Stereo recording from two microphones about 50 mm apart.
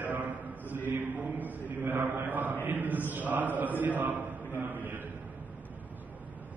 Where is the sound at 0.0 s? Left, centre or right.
Right.